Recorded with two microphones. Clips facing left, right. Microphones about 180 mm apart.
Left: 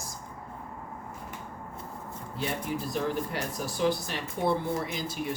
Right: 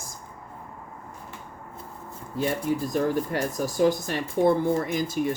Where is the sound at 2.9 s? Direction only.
45° right (ahead or behind).